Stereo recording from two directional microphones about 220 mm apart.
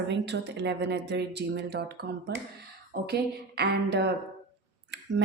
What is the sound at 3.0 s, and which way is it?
A woman's voice, 45° right (ahead or behind).